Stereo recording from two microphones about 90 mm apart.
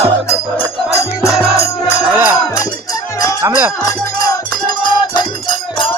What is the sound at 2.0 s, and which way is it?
Music, 15° right (ahead or behind).